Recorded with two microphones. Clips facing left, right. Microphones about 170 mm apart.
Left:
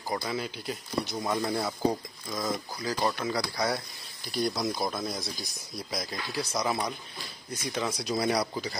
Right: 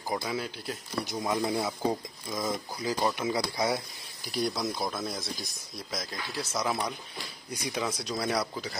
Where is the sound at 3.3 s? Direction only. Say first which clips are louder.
Right 1 dB; 25° right (ahead or behind).